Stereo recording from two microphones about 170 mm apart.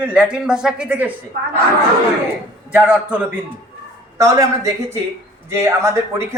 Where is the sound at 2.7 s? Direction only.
10° right (ahead or behind).